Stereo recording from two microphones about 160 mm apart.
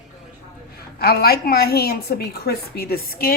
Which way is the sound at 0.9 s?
75° left (ahead or behind).